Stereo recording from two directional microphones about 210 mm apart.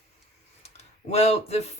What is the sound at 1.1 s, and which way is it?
Speech, 30° left (ahead or behind).